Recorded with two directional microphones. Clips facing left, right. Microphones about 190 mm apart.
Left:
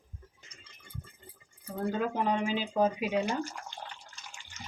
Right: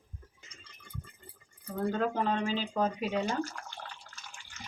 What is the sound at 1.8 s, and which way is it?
Speech, 10° left (ahead or behind).